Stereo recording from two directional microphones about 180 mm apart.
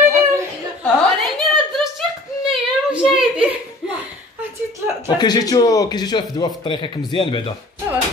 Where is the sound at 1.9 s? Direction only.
5° right (ahead or behind).